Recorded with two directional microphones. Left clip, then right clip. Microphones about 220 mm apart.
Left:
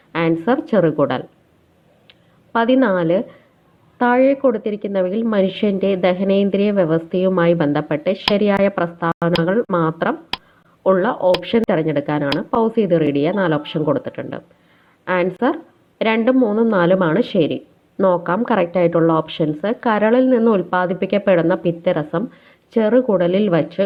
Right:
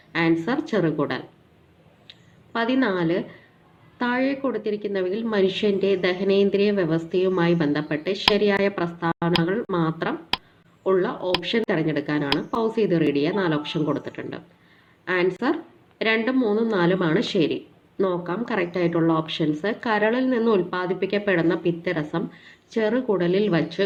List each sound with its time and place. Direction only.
0.1 s a woman's voice: 25° left (ahead or behind)
2.0 s a sound: 25° left (ahead or behind)
3.9 s a woman's voice: 25° left (ahead or behind)